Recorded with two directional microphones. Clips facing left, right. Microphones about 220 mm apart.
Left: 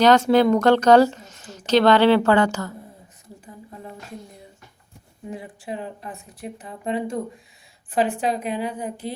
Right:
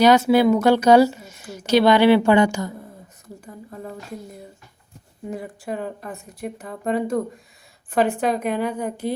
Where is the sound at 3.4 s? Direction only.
45° right (ahead or behind).